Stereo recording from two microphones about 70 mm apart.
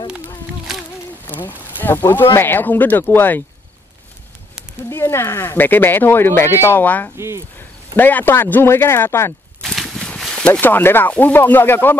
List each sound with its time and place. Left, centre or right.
1.3 s speech: left
4.9 s speech: left
6.8 s speech: left
7.2 s speech: right
7.9 s speech: left
9.6 s a sound: centre
10.5 s speech: left